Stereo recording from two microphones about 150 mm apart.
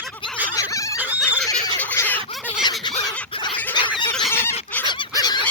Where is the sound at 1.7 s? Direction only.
15° left (ahead or behind).